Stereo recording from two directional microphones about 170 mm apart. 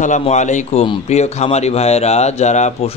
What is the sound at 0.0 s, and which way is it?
Speech, 45° left (ahead or behind).